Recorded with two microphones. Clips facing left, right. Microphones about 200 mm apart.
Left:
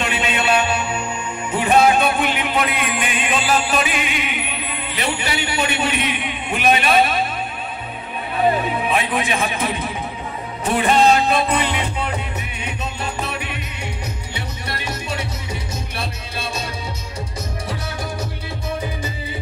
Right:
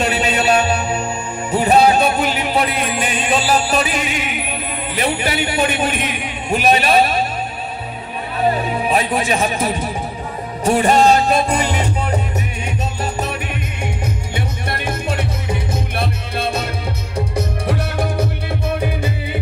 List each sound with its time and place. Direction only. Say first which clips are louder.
0.0 s music: right 4 dB; 40° right (ahead or behind)
8.6 s a man's voice: right 3 dB; 40° right (ahead or behind)
10.6 s music: right 3 dB; 40° right (ahead or behind); by 18.2 s 60° right (ahead or behind)